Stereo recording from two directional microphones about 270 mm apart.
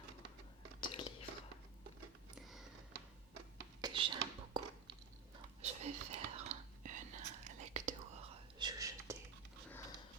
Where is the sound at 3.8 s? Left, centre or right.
Centre.